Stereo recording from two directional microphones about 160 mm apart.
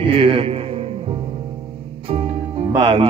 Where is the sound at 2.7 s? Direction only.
30° right (ahead or behind).